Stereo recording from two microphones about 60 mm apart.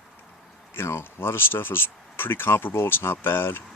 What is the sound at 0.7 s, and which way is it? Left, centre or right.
Speech, left.